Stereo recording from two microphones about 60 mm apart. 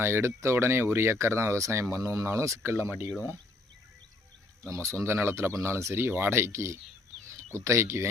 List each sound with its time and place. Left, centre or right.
0.0 s speech: right
2.8 s speech: right
4.7 s speech: right